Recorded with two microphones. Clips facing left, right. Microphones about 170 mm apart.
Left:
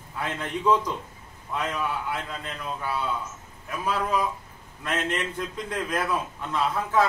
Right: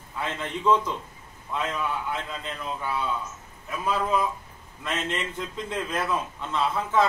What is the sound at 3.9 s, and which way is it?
A man's voice, 5° left (ahead or behind).